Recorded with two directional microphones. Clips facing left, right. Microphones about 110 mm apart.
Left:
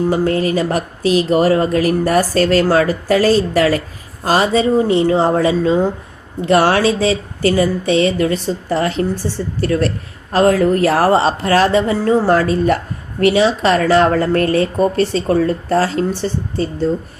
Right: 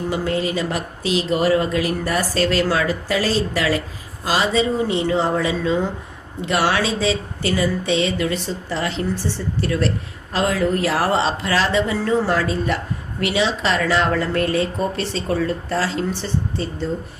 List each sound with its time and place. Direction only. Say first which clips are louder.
0.1 s speech: left 6 dB; 45° left (ahead or behind)